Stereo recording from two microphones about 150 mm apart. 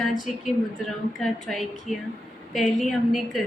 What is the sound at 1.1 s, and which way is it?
A woman's voice, centre (ahead or behind).